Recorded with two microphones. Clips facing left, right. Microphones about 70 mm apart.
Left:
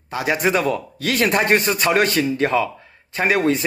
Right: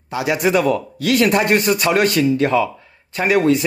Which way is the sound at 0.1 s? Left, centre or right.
Left.